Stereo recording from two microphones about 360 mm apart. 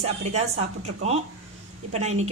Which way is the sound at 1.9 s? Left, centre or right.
Centre.